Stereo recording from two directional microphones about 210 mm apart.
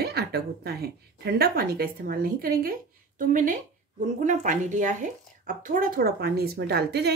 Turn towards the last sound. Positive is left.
turn(degrees=-50)  # may be behind; listen again after turning